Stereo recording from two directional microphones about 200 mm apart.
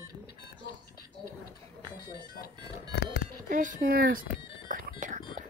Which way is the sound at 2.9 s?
55° left (ahead or behind).